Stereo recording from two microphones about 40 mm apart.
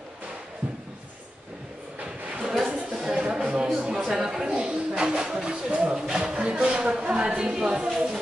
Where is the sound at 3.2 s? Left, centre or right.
Right.